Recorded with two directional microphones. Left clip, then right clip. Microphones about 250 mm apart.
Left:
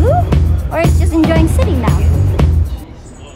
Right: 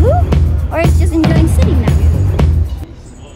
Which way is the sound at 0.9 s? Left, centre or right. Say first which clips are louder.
Even; centre.